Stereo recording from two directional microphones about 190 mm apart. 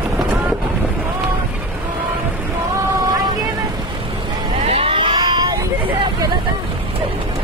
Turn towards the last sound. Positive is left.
turn(degrees=-20)  # may be behind; listen again after turning